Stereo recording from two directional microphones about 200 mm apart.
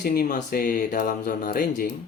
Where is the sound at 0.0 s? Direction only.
50° left (ahead or behind).